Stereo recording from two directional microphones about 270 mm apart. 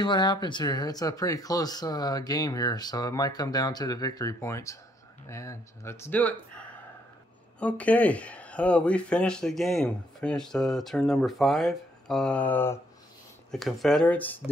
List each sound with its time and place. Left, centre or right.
0.0 s speech: centre